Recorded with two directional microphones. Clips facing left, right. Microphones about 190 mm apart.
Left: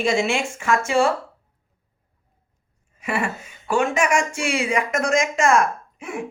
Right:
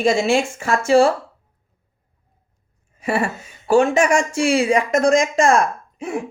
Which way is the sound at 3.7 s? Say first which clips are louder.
Right 5 dB; 35° right (ahead or behind).